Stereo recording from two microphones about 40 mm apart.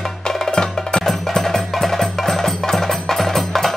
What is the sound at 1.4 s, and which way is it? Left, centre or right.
Wood block, centre.